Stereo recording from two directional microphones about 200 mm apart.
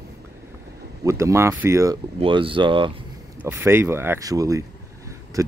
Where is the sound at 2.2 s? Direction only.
25° right (ahead or behind).